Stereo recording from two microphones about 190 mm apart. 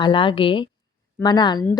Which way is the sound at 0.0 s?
25° left (ahead or behind).